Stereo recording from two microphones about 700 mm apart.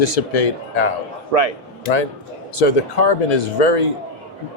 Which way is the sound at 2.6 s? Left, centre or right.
Left.